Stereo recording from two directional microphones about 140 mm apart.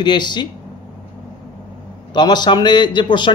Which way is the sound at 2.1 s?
30° left (ahead or behind).